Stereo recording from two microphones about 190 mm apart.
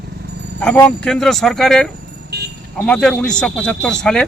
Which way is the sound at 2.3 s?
60° right (ahead or behind).